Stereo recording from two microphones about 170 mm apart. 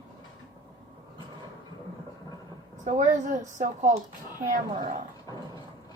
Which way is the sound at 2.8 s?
45° right (ahead or behind).